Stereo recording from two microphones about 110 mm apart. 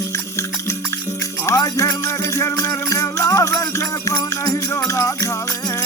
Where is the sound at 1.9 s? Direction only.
25° left (ahead or behind).